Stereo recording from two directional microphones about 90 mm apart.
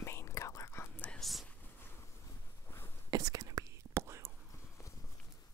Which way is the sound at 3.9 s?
30° right (ahead or behind).